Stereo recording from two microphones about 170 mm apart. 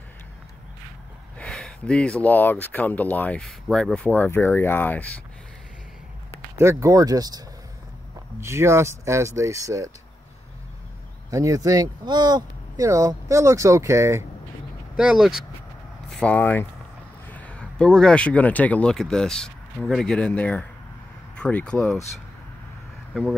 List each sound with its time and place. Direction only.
1.4 s speech: 5° left (ahead or behind)
6.6 s speech: 15° right (ahead or behind)
11.2 s speech: 20° right (ahead or behind)
15.0 s speech: 5° right (ahead or behind)